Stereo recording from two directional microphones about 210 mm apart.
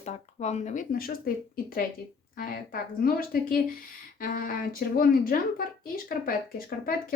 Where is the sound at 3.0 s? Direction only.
45° left (ahead or behind).